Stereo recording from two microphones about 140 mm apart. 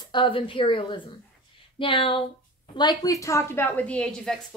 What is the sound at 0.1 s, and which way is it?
A woman's voice, 35° left (ahead or behind).